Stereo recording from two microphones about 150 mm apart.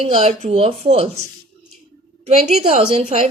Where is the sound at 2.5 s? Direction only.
45° right (ahead or behind).